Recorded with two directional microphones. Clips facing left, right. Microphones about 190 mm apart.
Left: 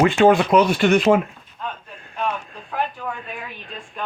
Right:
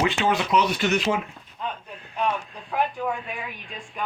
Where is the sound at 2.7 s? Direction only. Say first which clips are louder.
Right 1 dB; 5° right (ahead or behind).